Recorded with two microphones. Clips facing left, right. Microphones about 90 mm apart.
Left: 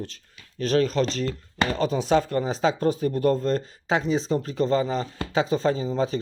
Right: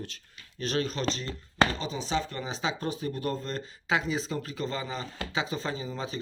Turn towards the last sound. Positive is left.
turn(degrees=40)  # may be behind; listen again after turning